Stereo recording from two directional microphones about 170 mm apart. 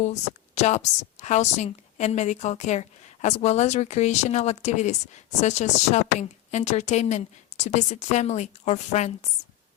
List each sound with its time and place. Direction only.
0.0 s a woman's voice: 40° left (ahead or behind)